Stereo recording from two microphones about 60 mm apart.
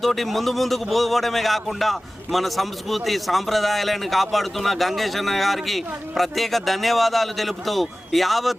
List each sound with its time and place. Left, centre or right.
0.0 s a man's voice: centre